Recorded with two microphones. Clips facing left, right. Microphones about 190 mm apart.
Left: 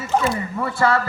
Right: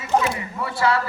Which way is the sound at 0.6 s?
50° left (ahead or behind).